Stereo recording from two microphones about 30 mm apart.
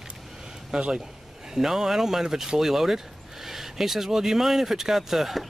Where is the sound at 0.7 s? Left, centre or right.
Right.